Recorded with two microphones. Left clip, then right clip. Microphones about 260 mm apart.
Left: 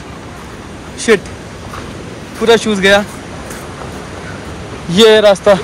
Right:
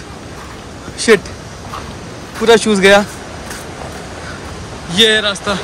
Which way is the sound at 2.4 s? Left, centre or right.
Centre.